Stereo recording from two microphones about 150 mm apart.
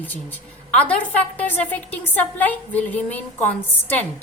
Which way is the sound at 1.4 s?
10° left (ahead or behind).